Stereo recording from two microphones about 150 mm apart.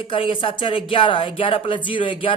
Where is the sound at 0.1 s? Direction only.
35° left (ahead or behind).